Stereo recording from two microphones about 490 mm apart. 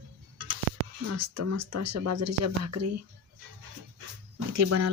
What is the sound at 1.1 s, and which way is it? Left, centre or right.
Speech, right.